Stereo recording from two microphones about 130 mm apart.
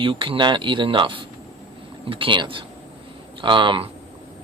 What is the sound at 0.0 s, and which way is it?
Speech, 40° right (ahead or behind).